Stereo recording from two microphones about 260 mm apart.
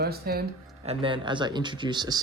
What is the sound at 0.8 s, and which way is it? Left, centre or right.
Speech, right.